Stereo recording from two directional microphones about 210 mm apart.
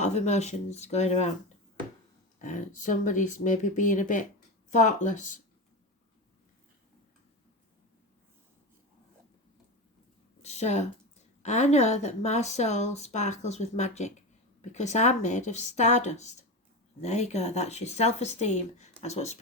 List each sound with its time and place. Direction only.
0.0 s speech: 30° left (ahead or behind)
2.4 s speech: 35° left (ahead or behind)
10.4 s a sound: 30° left (ahead or behind)
11.4 s speech: 35° left (ahead or behind)